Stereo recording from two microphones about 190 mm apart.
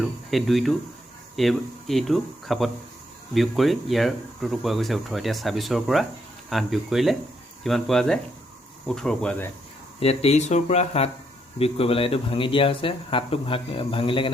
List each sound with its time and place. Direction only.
0.0 s speech: centre (ahead or behind)
10.0 s speech: 35° left (ahead or behind)